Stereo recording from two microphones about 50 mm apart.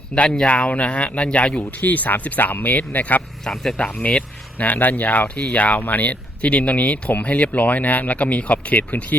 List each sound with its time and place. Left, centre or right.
0.2 s speech: centre
1.8 s speech: left
3.4 s speech: centre
3.8 s speech: left